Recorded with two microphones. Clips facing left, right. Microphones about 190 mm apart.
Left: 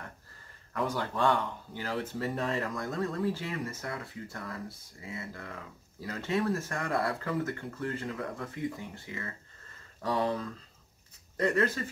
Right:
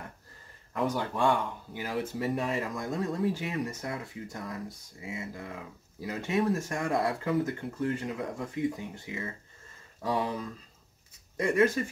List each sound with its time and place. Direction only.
0.7 s speech: 15° right (ahead or behind)